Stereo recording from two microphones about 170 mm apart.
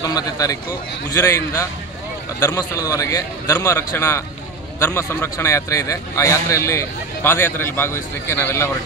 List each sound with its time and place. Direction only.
0.0 s a man's voice: 20° left (ahead or behind)